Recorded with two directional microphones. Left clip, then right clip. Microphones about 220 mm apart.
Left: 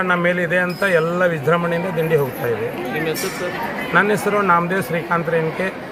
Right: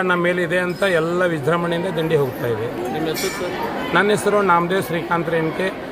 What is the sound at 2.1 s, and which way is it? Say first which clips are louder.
Speech: even; 10° right (ahead or behind).